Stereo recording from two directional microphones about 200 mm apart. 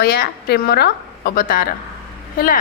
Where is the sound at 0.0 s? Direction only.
55° left (ahead or behind).